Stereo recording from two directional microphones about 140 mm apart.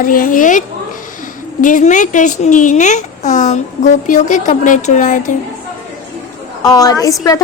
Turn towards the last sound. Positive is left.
turn(degrees=25)  # may be behind; listen again after turning